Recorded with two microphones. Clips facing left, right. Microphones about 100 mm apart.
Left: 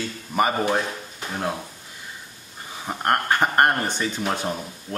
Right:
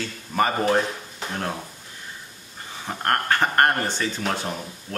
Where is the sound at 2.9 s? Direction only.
15° left (ahead or behind).